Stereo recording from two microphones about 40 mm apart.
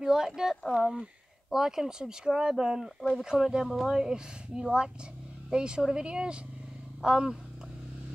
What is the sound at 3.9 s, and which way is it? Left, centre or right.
Speech, centre.